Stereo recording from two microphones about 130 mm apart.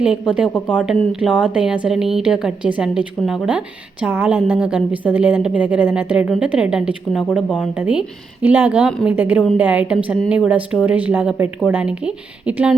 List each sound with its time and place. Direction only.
0.0 s a woman's voice: 5° right (ahead or behind)